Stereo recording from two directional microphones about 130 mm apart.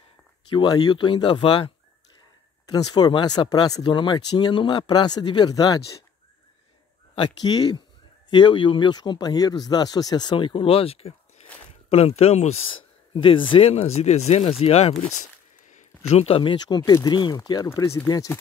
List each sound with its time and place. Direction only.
0.6 s speech: 35° left (ahead or behind)
2.7 s speech: 35° left (ahead or behind)
7.2 s speech: 35° left (ahead or behind); by 12.7 s 55° left (ahead or behind)
13.1 s speech: 40° left (ahead or behind)